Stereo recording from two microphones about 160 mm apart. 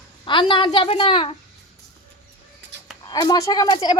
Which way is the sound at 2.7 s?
90° right.